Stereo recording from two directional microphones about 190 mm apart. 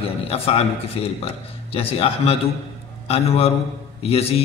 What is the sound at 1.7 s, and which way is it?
A man's voice, 30° left (ahead or behind).